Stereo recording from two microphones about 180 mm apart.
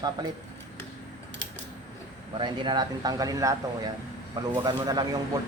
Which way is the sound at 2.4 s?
25° right (ahead or behind).